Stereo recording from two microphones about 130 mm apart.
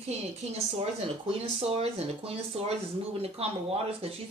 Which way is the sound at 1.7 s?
50° right (ahead or behind).